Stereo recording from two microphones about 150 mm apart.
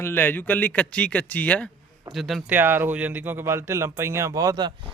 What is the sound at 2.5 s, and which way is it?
Speech, 15° right (ahead or behind).